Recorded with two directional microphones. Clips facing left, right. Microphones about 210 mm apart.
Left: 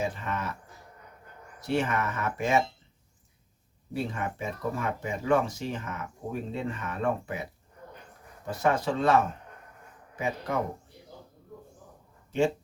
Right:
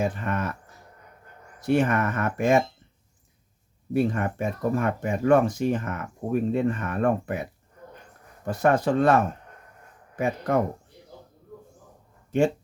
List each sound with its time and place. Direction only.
0.0 s speech: 55° right (ahead or behind)
1.6 s speech: 55° right (ahead or behind)
3.9 s speech: 55° right (ahead or behind)
8.4 s speech: 55° right (ahead or behind)